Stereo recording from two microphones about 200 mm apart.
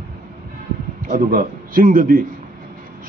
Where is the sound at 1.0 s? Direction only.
45° right (ahead or behind).